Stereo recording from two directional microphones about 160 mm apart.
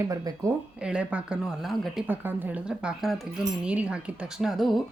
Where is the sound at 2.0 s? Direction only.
10° right (ahead or behind).